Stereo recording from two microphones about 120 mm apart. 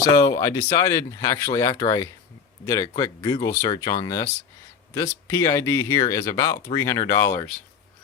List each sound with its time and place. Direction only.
0.1 s speech: 25° left (ahead or behind)